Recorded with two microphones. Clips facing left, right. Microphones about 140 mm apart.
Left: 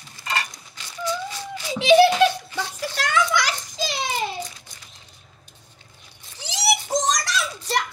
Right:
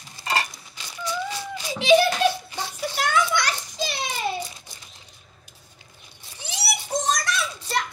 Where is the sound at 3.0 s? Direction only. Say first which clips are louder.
Left 1 dB; 90° left.